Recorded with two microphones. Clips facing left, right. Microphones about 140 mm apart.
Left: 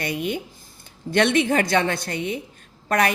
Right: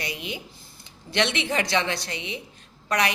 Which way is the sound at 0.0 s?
50° left (ahead or behind).